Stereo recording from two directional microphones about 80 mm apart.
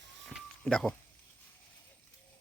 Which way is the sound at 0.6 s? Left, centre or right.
Centre.